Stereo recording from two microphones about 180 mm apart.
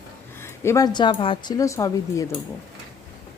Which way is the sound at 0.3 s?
15° left (ahead or behind).